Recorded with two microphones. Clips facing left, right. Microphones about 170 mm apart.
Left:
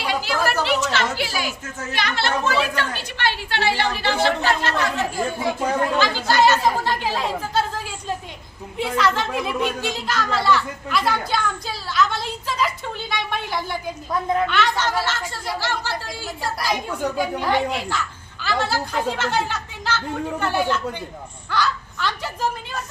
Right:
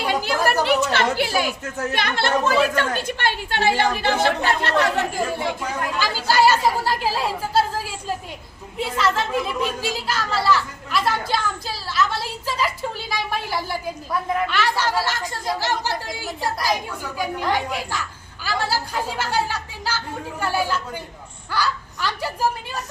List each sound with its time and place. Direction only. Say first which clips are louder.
0.0 s a sound: right 2 dB; 50° right (ahead or behind)
0.6 s a woman's voice: right 2 dB; 55° right (ahead or behind)
6.0 s speech: right 2 dB; 5° right (ahead or behind)
8.8 s a woman's voice: left 1 dB; centre (ahead or behind)